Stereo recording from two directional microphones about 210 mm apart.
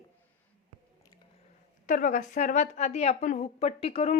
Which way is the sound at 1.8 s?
40° left (ahead or behind).